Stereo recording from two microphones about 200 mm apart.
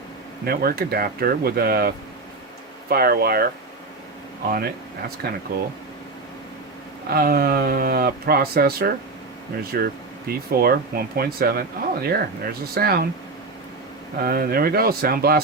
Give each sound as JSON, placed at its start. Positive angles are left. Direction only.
{"t": 0.4, "sound": "speech", "side_deg": -50}
{"t": 2.9, "sound": "speech", "side_deg": -50}
{"t": 4.5, "sound": "speech", "side_deg": -50}
{"t": 7.1, "sound": "speech", "side_deg": -50}
{"t": 14.2, "sound": "speech", "side_deg": -50}